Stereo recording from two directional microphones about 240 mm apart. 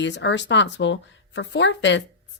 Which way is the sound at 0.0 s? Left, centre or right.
Left.